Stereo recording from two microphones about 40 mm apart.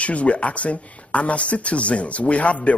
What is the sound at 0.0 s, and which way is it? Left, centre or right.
Speech, left.